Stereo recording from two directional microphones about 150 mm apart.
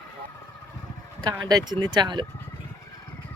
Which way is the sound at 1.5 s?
25° right (ahead or behind).